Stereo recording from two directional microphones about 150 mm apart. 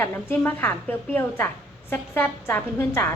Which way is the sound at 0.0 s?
15° left (ahead or behind).